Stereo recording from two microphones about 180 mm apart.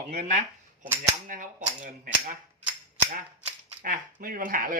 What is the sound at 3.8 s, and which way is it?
Speech, 50° right (ahead or behind).